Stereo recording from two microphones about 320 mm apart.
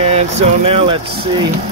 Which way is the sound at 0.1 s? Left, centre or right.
Centre.